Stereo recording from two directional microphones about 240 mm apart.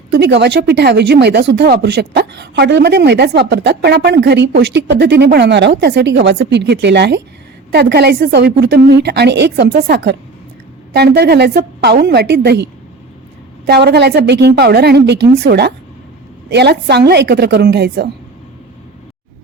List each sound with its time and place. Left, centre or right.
0.1 s a woman's voice: right
13.7 s speech: right